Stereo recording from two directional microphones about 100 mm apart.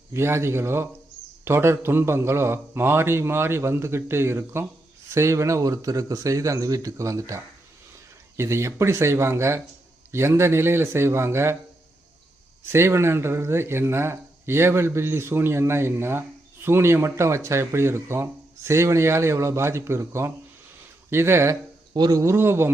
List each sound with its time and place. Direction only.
0.1 s a man's voice: 25° right (ahead or behind)
12.7 s speech: 25° right (ahead or behind)
21.9 s speech: 40° right (ahead or behind); by 22.7 s 25° right (ahead or behind)